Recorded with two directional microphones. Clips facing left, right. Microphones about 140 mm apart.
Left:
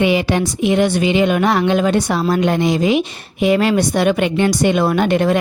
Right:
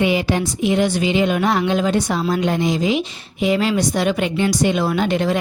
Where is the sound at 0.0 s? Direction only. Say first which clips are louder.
Left 3 dB; 75° left (ahead or behind).